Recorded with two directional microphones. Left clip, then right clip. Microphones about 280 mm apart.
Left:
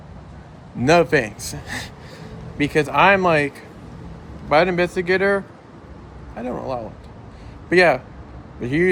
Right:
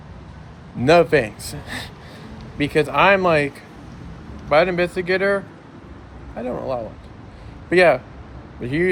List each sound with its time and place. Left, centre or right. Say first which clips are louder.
0.8 s a man's voice: right 1 dB; centre